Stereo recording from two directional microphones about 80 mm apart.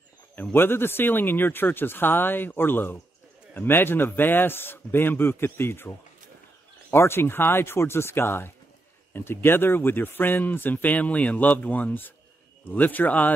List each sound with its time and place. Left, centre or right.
0.4 s speech: left